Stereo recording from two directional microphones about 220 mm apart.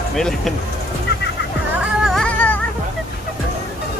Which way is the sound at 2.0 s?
5° left (ahead or behind).